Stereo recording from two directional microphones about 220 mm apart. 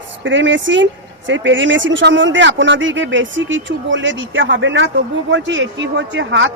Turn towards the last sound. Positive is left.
turn(degrees=-55)  # may be behind; listen again after turning